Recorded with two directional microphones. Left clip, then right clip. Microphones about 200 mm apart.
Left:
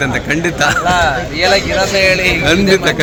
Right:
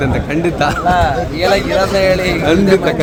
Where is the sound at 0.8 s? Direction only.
10° left (ahead or behind).